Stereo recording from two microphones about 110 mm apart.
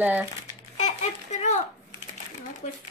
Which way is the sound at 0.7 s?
85° left.